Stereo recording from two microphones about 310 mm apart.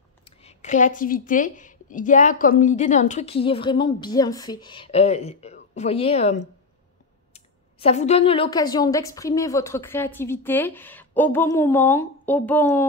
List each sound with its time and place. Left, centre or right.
0.4 s a woman's voice: left